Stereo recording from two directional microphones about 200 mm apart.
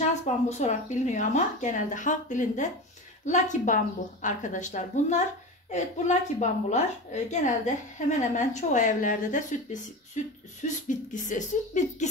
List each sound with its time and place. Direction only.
0.1 s a woman's voice: 35° left (ahead or behind)